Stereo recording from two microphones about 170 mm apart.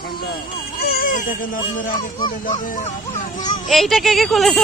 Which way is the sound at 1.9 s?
25° left (ahead or behind).